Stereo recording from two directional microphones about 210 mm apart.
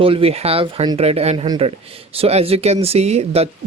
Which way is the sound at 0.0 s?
25° right (ahead or behind).